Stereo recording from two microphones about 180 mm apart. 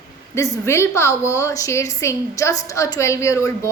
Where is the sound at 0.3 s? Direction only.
15° left (ahead or behind).